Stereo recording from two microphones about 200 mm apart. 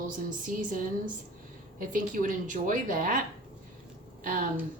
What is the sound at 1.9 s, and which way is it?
Speech, 40° right (ahead or behind).